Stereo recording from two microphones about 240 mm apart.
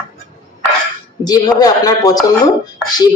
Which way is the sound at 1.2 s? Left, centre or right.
Centre.